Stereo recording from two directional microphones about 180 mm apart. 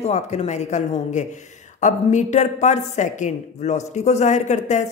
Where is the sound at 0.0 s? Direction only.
40° left (ahead or behind).